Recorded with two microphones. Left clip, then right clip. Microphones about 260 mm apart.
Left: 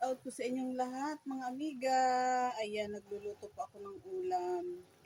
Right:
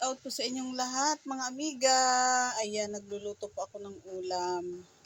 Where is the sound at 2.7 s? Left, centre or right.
Centre.